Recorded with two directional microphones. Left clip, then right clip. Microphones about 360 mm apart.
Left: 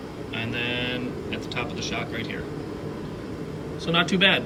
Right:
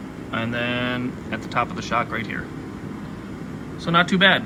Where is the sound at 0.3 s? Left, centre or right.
Centre.